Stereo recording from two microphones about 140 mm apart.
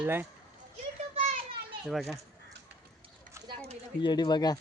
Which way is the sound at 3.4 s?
40° right (ahead or behind).